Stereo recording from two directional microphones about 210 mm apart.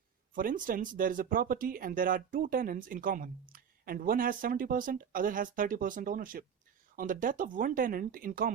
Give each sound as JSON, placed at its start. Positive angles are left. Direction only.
{"t": 0.3, "sound": "speech", "side_deg": -40}